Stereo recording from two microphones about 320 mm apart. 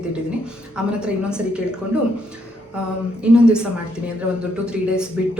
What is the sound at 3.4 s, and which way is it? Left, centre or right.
A woman's voice, centre.